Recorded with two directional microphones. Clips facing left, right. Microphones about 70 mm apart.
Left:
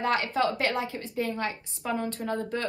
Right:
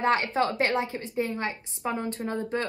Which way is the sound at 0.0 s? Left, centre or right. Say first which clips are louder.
Right 2 dB; right.